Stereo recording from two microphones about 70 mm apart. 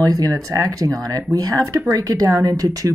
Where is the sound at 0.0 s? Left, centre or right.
Right.